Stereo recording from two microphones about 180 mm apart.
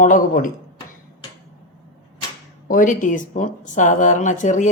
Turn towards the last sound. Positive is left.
turn(degrees=45)  # may be behind; listen again after turning